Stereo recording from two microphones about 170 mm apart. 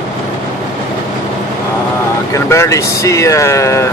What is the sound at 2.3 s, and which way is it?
Speech, 15° left (ahead or behind).